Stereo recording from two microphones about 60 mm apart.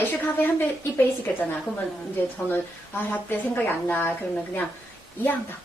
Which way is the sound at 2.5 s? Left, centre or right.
Left.